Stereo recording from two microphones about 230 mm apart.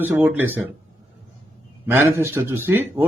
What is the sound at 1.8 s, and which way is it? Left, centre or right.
A man's voice, centre.